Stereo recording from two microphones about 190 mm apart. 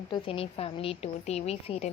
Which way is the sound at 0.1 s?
30° left (ahead or behind).